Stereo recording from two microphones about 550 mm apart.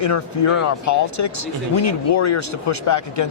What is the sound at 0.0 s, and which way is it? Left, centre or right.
Speech, left.